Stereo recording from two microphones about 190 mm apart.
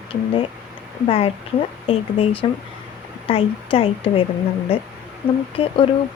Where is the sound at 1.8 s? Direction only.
30° left (ahead or behind).